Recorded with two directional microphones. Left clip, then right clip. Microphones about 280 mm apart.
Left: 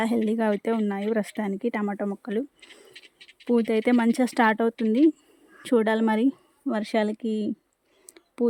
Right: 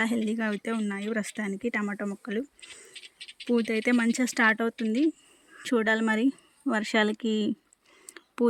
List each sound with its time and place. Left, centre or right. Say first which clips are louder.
0.0 s speech: left 4 dB; centre
2.9 s a sound: right 3 dB; right
3.4 s speech: left 4 dB; centre